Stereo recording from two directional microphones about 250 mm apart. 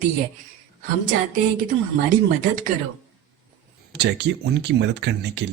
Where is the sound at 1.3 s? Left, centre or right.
Right.